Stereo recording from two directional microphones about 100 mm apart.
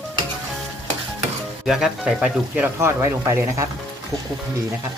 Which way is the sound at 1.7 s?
5° right (ahead or behind).